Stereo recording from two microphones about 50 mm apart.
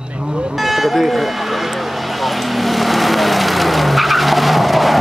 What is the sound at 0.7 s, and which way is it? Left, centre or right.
Speech, centre.